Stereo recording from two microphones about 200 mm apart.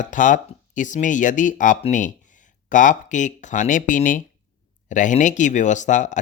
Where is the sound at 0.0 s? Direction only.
40° left (ahead or behind).